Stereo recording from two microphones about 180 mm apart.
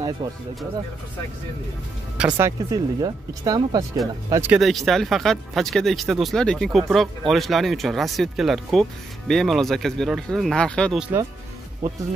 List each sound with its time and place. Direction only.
0.2 s speech: 20° right (ahead or behind)
2.1 s speech: 10° right (ahead or behind)
4.6 s speech: centre (ahead or behind)